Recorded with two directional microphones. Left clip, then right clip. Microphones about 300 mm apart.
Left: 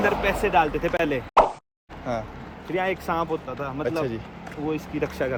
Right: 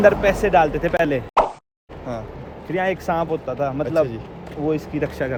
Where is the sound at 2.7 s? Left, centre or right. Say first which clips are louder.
Right 4 dB; centre.